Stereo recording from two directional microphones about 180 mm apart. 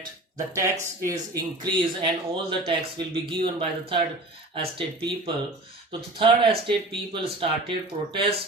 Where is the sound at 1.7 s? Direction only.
25° right (ahead or behind).